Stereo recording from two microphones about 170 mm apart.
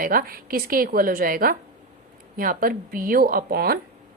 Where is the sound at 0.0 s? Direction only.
60° right (ahead or behind).